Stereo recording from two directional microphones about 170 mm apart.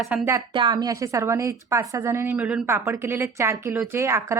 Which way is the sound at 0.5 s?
25° right (ahead or behind).